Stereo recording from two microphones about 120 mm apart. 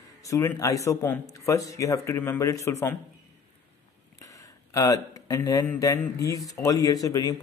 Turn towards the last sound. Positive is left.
turn(degrees=30)  # may be behind; listen again after turning